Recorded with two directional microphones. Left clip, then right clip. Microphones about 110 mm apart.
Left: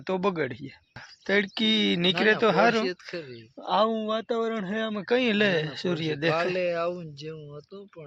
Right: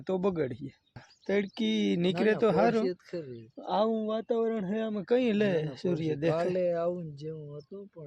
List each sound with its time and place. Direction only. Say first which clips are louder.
0.0 s speech: left 3 dB; 10° right (ahead or behind)
6.6 s speech: left 2 dB; 50° right (ahead or behind)